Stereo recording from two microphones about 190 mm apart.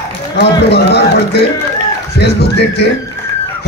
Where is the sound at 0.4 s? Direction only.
60° left (ahead or behind).